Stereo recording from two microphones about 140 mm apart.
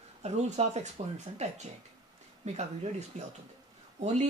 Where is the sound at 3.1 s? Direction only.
60° right (ahead or behind).